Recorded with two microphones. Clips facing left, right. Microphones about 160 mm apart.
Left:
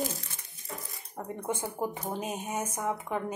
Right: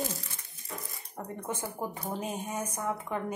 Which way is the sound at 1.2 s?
25° left (ahead or behind).